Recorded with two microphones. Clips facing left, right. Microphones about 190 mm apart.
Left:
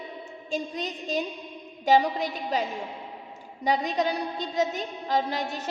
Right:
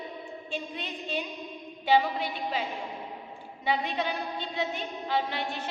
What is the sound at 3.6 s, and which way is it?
A woman's voice, 40° left (ahead or behind).